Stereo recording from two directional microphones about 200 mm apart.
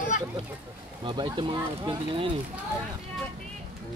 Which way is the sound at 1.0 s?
25° right (ahead or behind).